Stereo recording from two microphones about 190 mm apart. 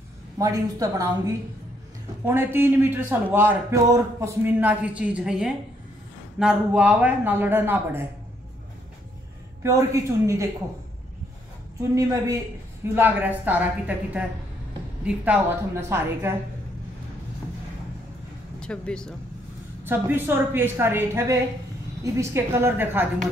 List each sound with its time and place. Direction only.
0.4 s a man's voice: 20° right (ahead or behind)
9.6 s a man's voice: 15° right (ahead or behind)
11.9 s a man's voice: 15° right (ahead or behind)
18.6 s speech: 5° left (ahead or behind)
19.8 s a man's voice: 10° right (ahead or behind)